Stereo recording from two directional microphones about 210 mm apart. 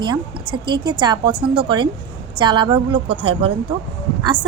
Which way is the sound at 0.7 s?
20° right (ahead or behind).